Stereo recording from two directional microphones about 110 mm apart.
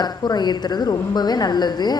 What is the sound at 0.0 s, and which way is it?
A woman's voice, 40° left (ahead or behind).